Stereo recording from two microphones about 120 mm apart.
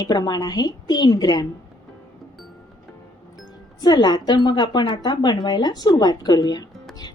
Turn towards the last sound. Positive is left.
turn(degrees=35)  # may be behind; listen again after turning